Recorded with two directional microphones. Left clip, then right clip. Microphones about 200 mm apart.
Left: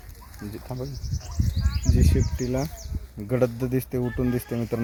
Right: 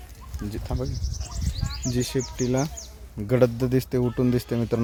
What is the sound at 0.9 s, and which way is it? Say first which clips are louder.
Speech: right 1 dB; 55° right (ahead or behind).